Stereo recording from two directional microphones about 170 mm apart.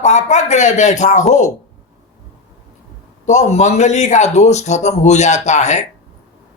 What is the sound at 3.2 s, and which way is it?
Speech, 45° left (ahead or behind).